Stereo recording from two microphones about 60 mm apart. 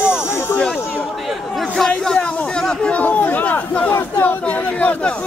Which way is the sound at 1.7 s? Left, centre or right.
Centre.